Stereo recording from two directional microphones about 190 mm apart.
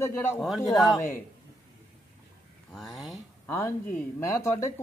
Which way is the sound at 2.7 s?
Centre (ahead or behind).